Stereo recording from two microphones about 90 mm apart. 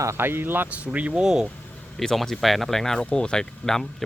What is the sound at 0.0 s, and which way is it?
Speech, 30° right (ahead or behind).